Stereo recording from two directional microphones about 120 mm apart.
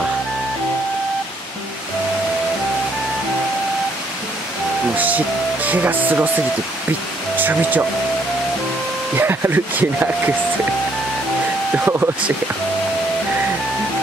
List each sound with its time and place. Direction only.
4.9 s speech: 15° right (ahead or behind)
7.3 s speech: 15° right (ahead or behind)
9.1 s speech: 20° right (ahead or behind)
11.7 s speech: 15° right (ahead or behind)